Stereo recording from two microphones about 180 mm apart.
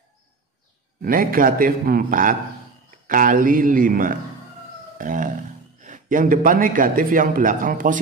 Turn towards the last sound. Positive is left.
turn(degrees=-50)  # may be behind; listen again after turning